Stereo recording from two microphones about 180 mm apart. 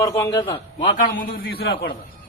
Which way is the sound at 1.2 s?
55° left (ahead or behind).